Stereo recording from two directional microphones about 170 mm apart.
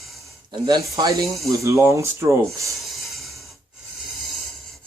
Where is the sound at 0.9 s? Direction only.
20° right (ahead or behind).